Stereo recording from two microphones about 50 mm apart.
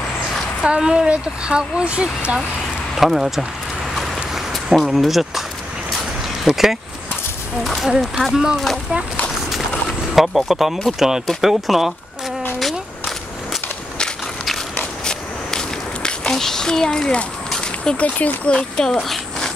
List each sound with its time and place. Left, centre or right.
0.7 s speech: centre
3.0 s speech: centre
3.9 s a sound: centre
6.4 s speech: centre
9.5 s a sound: centre
10.9 s speech: centre
12.5 s a sound: centre
15.0 s walk: centre
17.6 s speech: left